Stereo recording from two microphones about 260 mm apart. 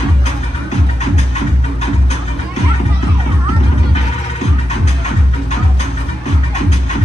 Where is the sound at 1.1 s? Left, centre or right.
Left.